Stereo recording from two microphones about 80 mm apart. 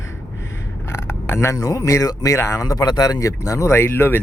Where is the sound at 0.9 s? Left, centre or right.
Left.